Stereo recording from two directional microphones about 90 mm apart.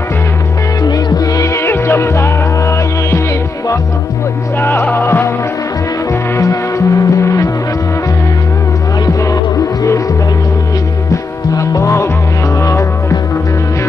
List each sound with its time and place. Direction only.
0.8 s music: 45° left (ahead or behind)
4.6 s music: 25° left (ahead or behind)
6.3 s music: 35° left (ahead or behind)
11.5 s music: 40° left (ahead or behind)